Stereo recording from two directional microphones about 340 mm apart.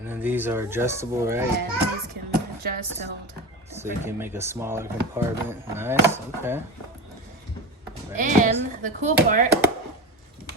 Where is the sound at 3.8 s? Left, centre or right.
Centre.